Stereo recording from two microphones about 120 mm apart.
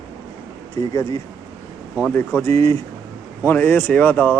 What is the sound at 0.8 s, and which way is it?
Speech, 35° left (ahead or behind).